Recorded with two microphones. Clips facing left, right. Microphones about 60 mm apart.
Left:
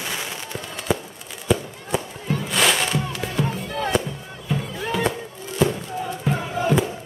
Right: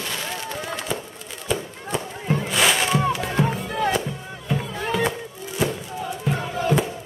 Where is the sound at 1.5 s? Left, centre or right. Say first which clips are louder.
Left 4 dB; centre.